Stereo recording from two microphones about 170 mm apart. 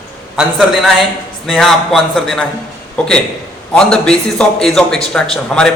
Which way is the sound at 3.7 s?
5° left (ahead or behind).